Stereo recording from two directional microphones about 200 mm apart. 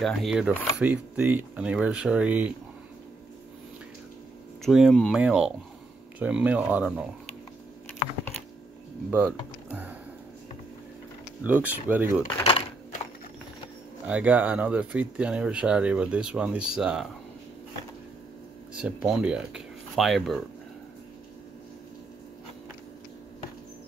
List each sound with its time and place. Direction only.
0.0 s speech: centre (ahead or behind)
4.6 s speech: centre (ahead or behind)
9.7 s a sound: 10° right (ahead or behind)
11.4 s speech: 10° right (ahead or behind)
12.4 s typing: 25° left (ahead or behind)
14.0 s speech: 5° right (ahead or behind)
18.7 s speech: 5° right (ahead or behind)